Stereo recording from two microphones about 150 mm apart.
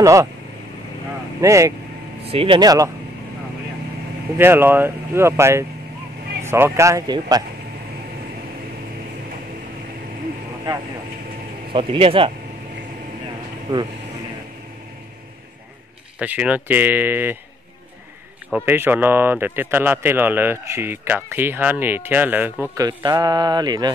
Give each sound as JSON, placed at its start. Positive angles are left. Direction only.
{"t": 0.0, "sound": "speech", "side_deg": -20}
{"t": 1.4, "sound": "speech", "side_deg": -20}
{"t": 2.2, "sound": "speech", "side_deg": -40}
{"t": 4.4, "sound": "speech", "side_deg": -15}
{"t": 11.7, "sound": "speech", "side_deg": -40}
{"t": 16.2, "sound": "speech", "side_deg": -10}
{"t": 18.7, "sound": "speech", "side_deg": -15}
{"t": 22.8, "sound": "speech", "side_deg": -25}